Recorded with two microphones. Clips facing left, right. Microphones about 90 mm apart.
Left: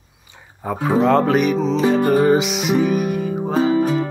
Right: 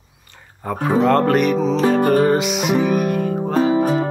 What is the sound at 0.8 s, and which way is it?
Speech, centre (ahead or behind).